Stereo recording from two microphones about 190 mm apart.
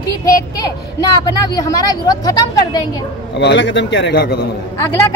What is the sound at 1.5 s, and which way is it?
A woman's voice, 20° left (ahead or behind).